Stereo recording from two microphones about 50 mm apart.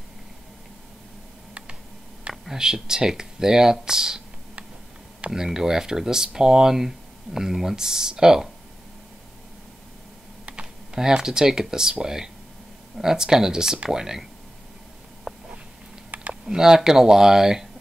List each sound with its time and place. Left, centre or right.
2.4 s speech: centre
5.3 s speech: centre
10.4 s speech: centre
15.3 s a sound: centre
16.1 s typing: right
16.4 s speech: centre